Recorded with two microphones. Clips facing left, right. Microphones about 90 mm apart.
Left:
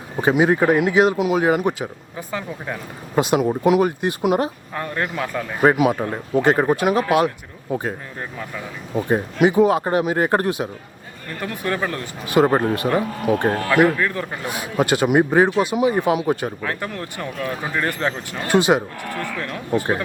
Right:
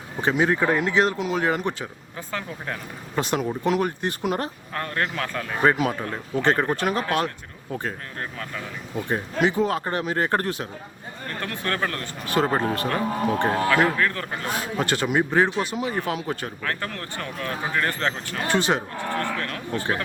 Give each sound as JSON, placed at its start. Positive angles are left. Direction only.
{"t": 0.2, "sound": "speech", "side_deg": 10}